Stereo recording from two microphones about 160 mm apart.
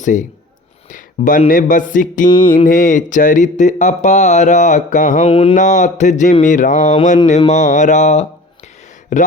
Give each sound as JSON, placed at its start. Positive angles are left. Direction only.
{"t": 0.0, "sound": "speech", "side_deg": 50}
{"t": 0.9, "sound": "a sound", "side_deg": 55}
{"t": 1.5, "sound": "music", "side_deg": 55}
{"t": 2.6, "sound": "speech", "side_deg": 55}
{"t": 5.3, "sound": "speech", "side_deg": 35}
{"t": 5.5, "sound": "speech", "side_deg": 50}